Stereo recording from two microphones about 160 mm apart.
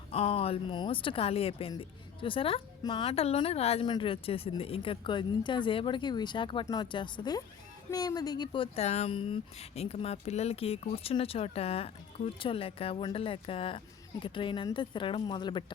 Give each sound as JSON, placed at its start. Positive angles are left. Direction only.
{"t": 0.1, "sound": "speech", "side_deg": 35}